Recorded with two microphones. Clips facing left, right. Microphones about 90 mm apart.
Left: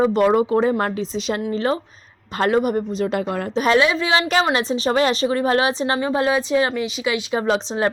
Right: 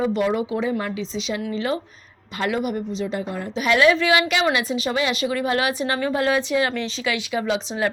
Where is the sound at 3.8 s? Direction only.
20° left (ahead or behind).